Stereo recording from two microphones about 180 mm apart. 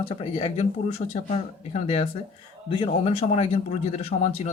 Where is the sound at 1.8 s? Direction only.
35° left (ahead or behind).